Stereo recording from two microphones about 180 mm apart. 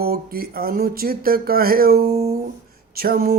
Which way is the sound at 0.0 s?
60° right (ahead or behind).